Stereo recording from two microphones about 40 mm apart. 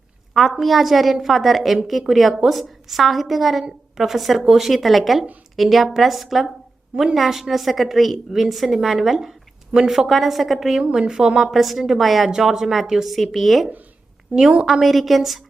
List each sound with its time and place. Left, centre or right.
0.6 s a woman's voice: centre
6.9 s a woman's voice: centre
10.8 s a woman's voice: right
11.5 s a woman's voice: centre
13.1 s a woman's voice: centre
14.3 s a woman's voice: right
14.7 s a woman's voice: centre